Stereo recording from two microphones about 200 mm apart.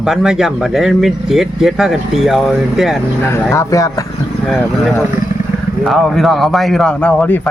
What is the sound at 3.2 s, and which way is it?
Speech, 10° left (ahead or behind).